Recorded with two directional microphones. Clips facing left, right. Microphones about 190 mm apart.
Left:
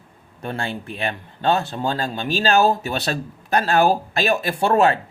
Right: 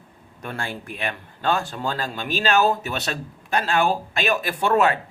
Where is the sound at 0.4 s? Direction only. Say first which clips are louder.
Left 4 dB; 25° left (ahead or behind).